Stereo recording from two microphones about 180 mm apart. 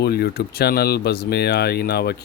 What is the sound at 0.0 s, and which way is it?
Speech, 60° left (ahead or behind).